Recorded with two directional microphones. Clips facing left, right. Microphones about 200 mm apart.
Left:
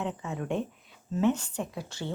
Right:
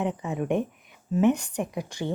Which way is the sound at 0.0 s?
15° right (ahead or behind).